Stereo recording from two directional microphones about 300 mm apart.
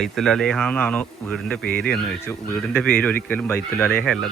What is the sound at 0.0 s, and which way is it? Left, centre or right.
Speech, centre.